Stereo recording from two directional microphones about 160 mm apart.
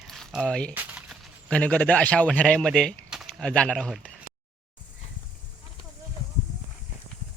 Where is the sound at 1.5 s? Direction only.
10° left (ahead or behind).